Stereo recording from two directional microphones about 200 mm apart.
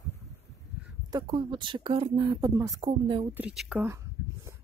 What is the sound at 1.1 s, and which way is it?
Speech, 25° right (ahead or behind).